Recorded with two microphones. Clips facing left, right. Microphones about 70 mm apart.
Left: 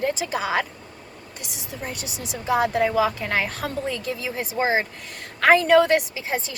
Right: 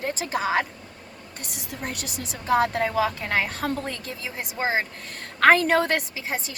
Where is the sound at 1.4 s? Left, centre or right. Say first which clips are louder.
Even; right.